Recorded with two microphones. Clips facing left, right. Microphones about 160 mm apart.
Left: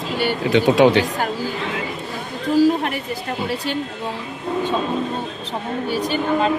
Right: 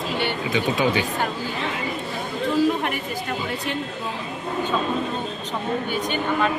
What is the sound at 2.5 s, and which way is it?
Speech, 35° left (ahead or behind).